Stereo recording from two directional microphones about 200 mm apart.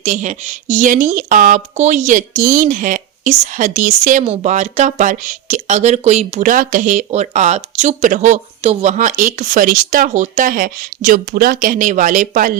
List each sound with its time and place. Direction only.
0.0 s speech: 35° right (ahead or behind)